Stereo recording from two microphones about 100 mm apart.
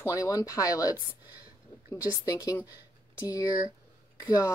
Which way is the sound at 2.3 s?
40° left (ahead or behind).